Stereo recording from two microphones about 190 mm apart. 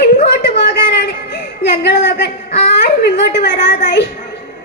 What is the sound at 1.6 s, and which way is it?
A woman's voice, 60° left (ahead or behind).